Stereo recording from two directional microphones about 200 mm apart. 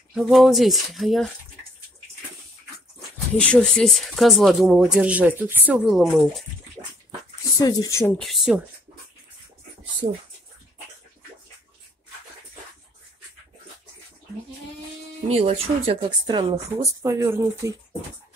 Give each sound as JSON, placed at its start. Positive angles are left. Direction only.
{"t": 0.1, "sound": "speech", "side_deg": 0}
{"t": 3.3, "sound": "speech", "side_deg": 5}
{"t": 7.5, "sound": "speech", "side_deg": 20}
{"t": 8.2, "sound": "speech", "side_deg": 0}
{"t": 15.2, "sound": "speech", "side_deg": -30}